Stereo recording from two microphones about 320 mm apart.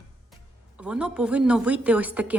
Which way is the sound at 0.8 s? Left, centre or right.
Centre.